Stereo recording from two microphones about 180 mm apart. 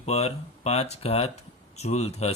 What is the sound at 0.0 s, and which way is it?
Speech, 35° left (ahead or behind).